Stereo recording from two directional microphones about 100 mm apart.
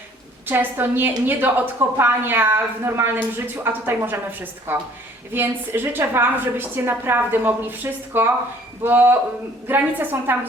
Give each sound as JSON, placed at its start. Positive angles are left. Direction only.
{"t": 0.4, "sound": "a woman's voice", "side_deg": -20}